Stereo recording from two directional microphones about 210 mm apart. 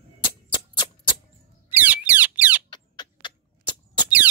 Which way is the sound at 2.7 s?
20° left (ahead or behind).